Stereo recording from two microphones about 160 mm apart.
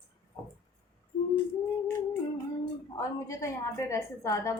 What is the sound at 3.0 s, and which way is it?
A woman's voice, 20° left (ahead or behind).